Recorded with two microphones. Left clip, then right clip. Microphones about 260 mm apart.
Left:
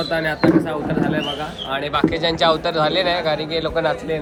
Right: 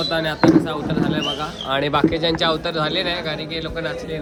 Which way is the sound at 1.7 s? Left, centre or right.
Right.